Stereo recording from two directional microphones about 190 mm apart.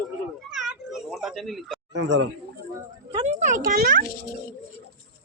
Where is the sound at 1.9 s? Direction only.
65° right (ahead or behind).